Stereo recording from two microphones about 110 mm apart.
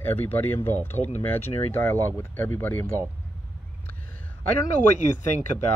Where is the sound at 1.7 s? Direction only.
20° left (ahead or behind).